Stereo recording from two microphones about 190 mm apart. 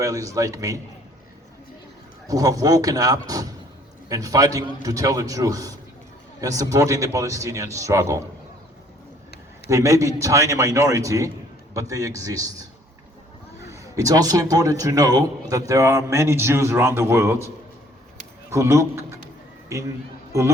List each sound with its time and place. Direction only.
0.0 s a man's voice: 15° right (ahead or behind)
2.2 s a man's voice: 20° right (ahead or behind)
9.6 s a man's voice: 15° right (ahead or behind)
13.7 s a man's voice: 15° right (ahead or behind)
18.5 s a man's voice: 15° right (ahead or behind)